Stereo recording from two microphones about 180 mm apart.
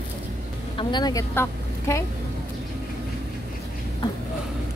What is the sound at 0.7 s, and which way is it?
A woman's voice, 25° left (ahead or behind).